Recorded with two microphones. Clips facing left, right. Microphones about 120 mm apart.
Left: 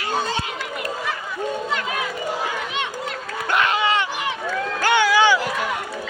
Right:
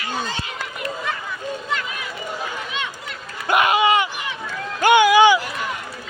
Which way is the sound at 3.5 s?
10° right (ahead or behind).